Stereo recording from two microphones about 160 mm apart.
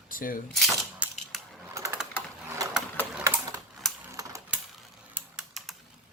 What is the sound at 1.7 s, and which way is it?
Typing, 20° right (ahead or behind).